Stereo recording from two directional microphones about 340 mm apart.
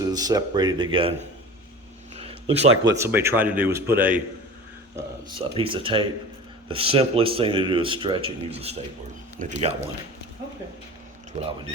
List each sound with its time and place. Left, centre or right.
0.0 s speech: centre
2.2 s a sound: centre
2.8 s speech: centre
11.3 s speech: centre